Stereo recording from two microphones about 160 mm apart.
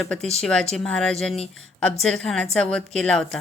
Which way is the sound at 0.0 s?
5° left (ahead or behind).